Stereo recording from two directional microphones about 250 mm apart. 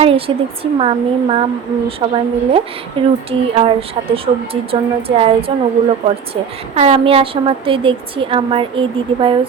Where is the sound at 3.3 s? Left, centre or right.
Right.